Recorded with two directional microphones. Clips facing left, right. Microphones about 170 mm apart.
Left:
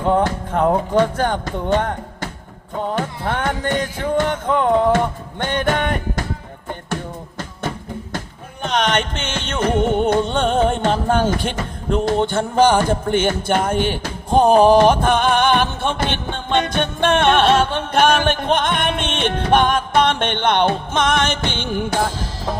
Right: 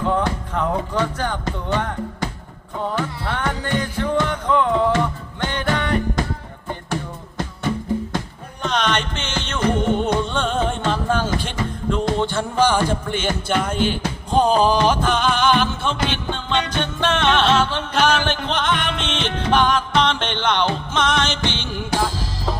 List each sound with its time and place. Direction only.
0.0 s music: 50° left (ahead or behind)
3.0 s music: 50° left (ahead or behind)
8.6 s music: 55° left (ahead or behind)